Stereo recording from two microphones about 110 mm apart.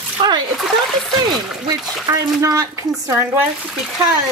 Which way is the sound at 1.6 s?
30° right (ahead or behind).